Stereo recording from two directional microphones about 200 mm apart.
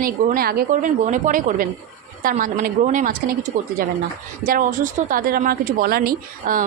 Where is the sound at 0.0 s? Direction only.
45° right (ahead or behind).